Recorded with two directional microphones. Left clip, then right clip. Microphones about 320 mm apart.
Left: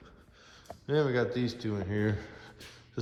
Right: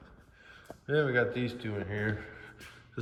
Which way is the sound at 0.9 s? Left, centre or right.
Centre.